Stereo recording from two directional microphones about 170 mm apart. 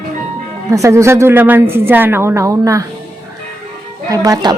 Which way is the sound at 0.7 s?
20° right (ahead or behind).